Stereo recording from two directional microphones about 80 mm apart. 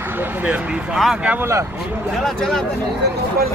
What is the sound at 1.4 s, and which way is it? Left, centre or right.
Speech, right.